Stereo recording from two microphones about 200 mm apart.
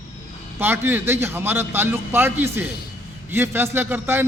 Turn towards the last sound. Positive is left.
turn(degrees=-10)  # may be behind; listen again after turning